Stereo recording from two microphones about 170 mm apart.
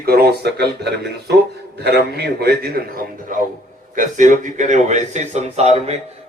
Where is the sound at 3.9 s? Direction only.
50° right (ahead or behind).